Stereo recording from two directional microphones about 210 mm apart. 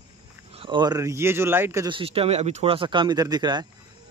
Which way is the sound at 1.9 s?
25° right (ahead or behind).